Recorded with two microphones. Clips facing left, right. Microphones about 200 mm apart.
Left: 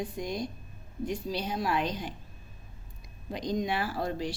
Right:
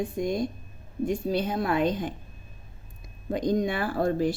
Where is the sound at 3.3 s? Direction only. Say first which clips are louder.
Right 5 dB; 50° right (ahead or behind).